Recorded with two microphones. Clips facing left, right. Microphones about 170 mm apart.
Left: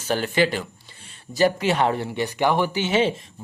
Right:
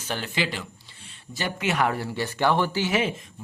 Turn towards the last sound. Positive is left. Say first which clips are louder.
# left 4 dB
turn(degrees=25)  # may be behind; listen again after turning